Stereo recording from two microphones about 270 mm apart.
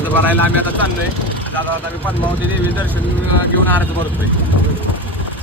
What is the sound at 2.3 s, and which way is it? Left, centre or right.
Speech, centre.